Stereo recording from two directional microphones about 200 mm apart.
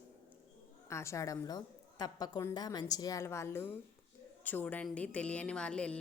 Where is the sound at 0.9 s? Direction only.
15° left (ahead or behind).